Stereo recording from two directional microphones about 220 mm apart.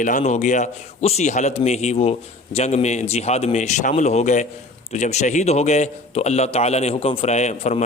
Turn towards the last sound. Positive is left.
turn(degrees=30)  # may be behind; listen again after turning